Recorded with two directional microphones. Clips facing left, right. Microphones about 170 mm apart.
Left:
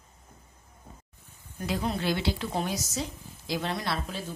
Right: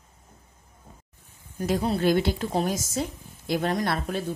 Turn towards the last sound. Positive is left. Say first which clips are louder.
# right 6 dB
turn(degrees=-55)  # may be behind; listen again after turning